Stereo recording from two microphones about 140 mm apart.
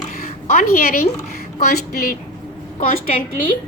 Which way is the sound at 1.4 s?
90° left.